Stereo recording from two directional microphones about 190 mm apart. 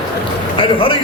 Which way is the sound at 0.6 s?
30° left (ahead or behind).